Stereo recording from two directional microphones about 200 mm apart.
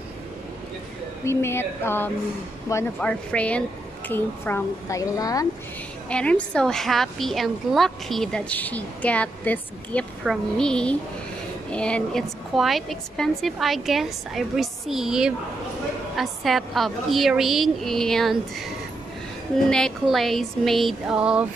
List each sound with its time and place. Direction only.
1.2 s a woman's voice: 15° left (ahead or behind)
6.0 s a woman's voice: 5° left (ahead or behind)
19.5 s a woman's voice: centre (ahead or behind)